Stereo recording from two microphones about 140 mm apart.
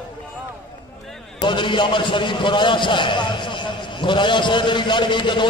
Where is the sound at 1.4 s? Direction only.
35° left (ahead or behind).